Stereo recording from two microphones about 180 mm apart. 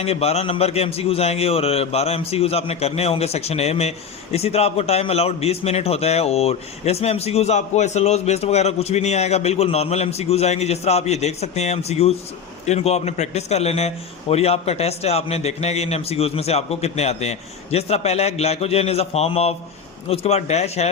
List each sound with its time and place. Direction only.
0.0 s a man's voice: 35° left (ahead or behind)